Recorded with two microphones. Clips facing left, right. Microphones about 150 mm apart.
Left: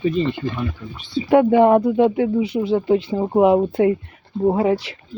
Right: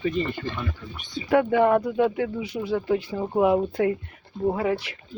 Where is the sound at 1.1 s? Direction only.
30° left (ahead or behind).